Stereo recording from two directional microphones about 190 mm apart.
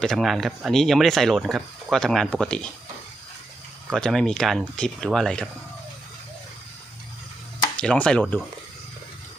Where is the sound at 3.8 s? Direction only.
Centre (ahead or behind).